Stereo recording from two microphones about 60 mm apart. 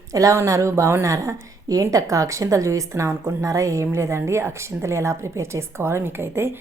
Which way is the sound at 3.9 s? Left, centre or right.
Right.